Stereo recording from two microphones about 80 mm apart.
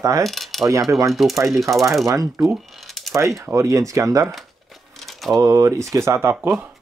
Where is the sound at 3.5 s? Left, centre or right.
Right.